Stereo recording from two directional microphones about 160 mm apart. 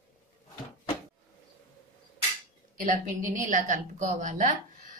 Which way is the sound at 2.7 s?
55° right (ahead or behind).